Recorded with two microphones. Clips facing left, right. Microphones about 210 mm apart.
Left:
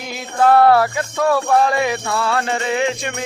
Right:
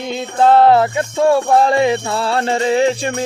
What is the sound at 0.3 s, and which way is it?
Music, 25° right (ahead or behind).